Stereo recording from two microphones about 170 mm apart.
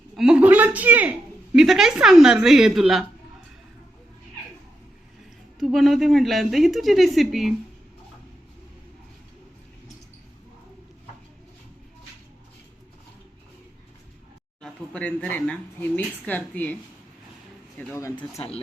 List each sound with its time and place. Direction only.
0.2 s a woman's voice: 5° right (ahead or behind)
5.5 s a woman's voice: centre (ahead or behind)
14.6 s speech: 5° left (ahead or behind)
17.7 s speech: 10° left (ahead or behind)